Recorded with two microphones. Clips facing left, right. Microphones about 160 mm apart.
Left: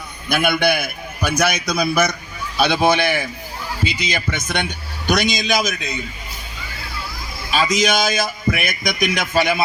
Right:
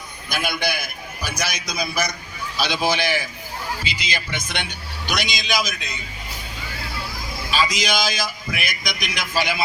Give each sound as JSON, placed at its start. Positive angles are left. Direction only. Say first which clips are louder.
{"t": 0.3, "sound": "a man's voice", "louder": "left 7 dB", "side_deg": 55}
{"t": 7.5, "sound": "a man's voice", "louder": "left 4 dB", "side_deg": 50}